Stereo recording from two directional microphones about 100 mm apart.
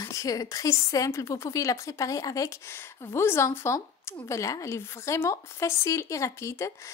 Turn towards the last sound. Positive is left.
turn(degrees=30)  # may be behind; listen again after turning